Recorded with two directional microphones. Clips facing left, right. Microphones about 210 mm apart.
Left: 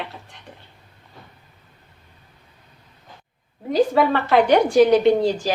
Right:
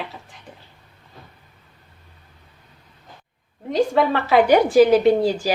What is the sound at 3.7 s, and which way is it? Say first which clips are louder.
A woman's voice: left 1 dB; centre (ahead or behind).